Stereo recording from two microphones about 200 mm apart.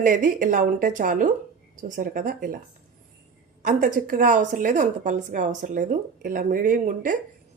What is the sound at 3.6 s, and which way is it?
A woman's voice, 40° right (ahead or behind).